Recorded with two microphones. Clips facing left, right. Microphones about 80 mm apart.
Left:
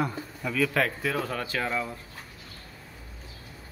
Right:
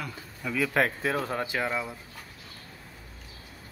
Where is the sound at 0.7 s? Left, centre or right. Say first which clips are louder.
Right 1 dB; right.